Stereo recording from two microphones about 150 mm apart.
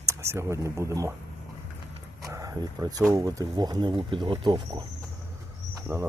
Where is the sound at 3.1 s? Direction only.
25° right (ahead or behind).